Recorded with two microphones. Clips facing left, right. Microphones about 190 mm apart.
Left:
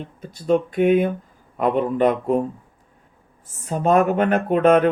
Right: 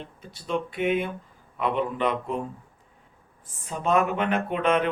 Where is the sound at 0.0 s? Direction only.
45° left (ahead or behind).